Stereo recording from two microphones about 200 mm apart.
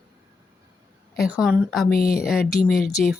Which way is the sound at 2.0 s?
50° left (ahead or behind).